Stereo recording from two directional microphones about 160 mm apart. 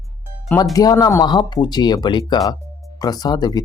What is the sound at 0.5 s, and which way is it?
Speech, 20° left (ahead or behind).